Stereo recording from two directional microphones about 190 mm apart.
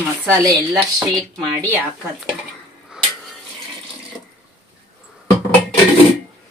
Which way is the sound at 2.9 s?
5° right (ahead or behind).